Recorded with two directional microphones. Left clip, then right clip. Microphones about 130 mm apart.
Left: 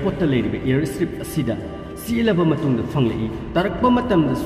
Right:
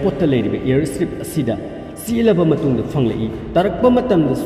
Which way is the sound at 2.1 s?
10° right (ahead or behind).